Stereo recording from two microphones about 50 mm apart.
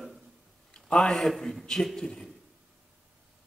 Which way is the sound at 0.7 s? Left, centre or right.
Centre.